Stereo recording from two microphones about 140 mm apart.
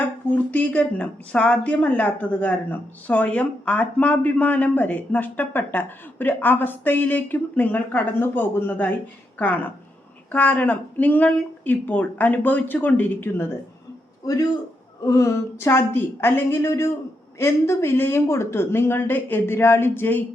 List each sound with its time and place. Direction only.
0.3 s speech: 10° left (ahead or behind)
10.3 s speech: 10° left (ahead or behind)
15.0 s a woman's voice: 25° left (ahead or behind)